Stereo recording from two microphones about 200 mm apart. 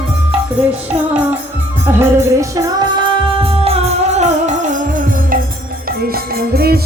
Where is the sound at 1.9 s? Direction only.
15° right (ahead or behind); by 6.8 s 50° right (ahead or behind).